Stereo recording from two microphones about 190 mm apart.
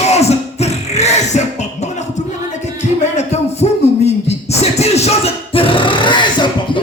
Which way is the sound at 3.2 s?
35° left (ahead or behind).